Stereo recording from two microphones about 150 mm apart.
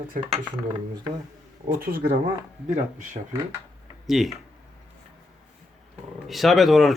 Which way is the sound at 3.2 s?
55° right (ahead or behind).